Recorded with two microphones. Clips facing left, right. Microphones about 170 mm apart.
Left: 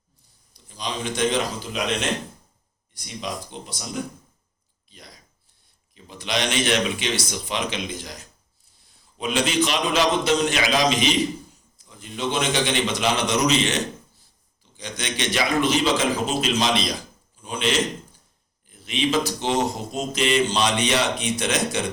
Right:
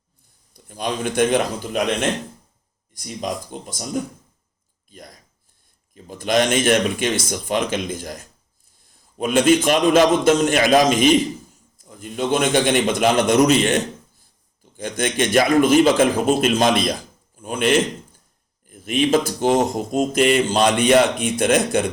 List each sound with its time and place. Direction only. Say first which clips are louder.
0.5 s a man's voice: right 5 dB; 50° right (ahead or behind)
4.9 s a sound: right 6 dB; 50° right (ahead or behind)
5.9 s a man's voice: right 8 dB; 50° right (ahead or behind)